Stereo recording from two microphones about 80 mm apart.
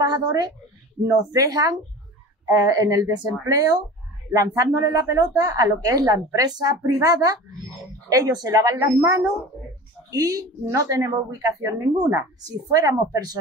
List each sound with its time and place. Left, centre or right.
0.0 s a woman's voice: right